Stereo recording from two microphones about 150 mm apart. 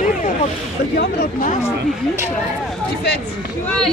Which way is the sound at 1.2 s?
60° left (ahead or behind).